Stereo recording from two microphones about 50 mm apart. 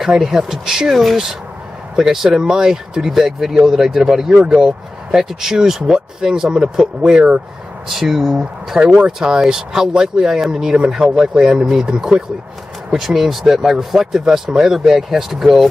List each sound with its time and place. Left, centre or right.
0.2 s speech: centre
4.3 s speech: right
4.6 s speech: centre
8.8 s speech: centre